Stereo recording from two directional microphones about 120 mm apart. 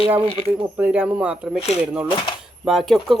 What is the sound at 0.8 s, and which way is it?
Speech, 10° right (ahead or behind).